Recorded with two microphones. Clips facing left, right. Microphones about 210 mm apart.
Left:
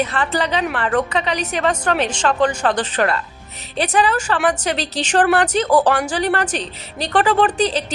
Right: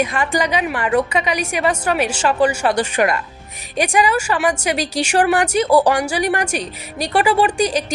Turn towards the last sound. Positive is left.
turn(degrees=-10)  # may be behind; listen again after turning